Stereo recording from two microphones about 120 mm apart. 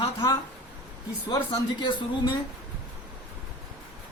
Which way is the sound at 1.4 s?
40° left (ahead or behind).